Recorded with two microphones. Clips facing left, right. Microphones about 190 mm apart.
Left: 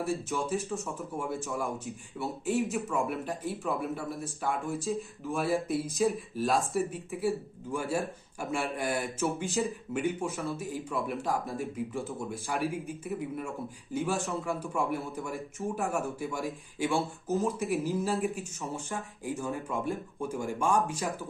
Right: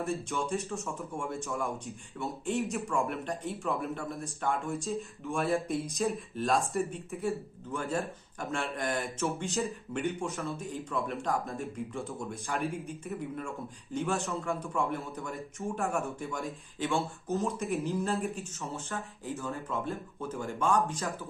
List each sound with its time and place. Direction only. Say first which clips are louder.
0.1 s speech: left 2 dB; centre (ahead or behind)
16.4 s speech: left 3 dB; 15° left (ahead or behind)
17.0 s speech: left 2 dB; centre (ahead or behind)